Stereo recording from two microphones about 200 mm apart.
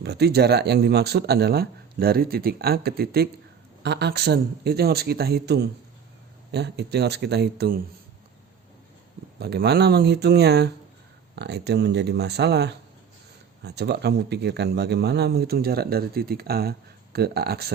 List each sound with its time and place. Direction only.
0.0 s speech: 55° right (ahead or behind)
9.4 s speech: 55° right (ahead or behind)